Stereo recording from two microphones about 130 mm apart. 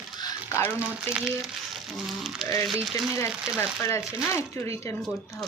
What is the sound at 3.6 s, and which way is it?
A woman's voice, 20° left (ahead or behind).